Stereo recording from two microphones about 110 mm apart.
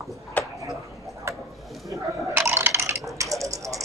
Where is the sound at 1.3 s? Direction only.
25° right (ahead or behind).